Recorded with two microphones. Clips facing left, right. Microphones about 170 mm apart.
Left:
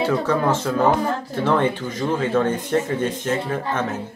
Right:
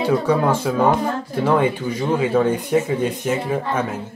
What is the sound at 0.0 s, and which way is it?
Speech, 10° right (ahead or behind).